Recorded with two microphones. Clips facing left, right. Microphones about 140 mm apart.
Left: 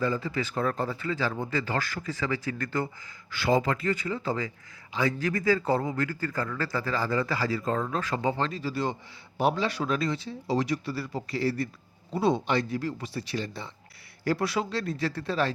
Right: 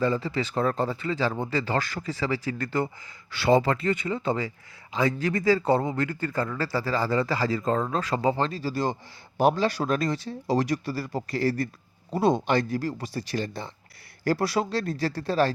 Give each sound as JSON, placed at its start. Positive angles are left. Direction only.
{"t": 0.0, "sound": "a man's voice", "side_deg": -30}
{"t": 1.9, "sound": "a man's voice", "side_deg": -20}